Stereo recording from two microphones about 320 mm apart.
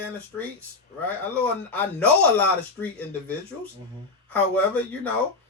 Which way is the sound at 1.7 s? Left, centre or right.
Centre.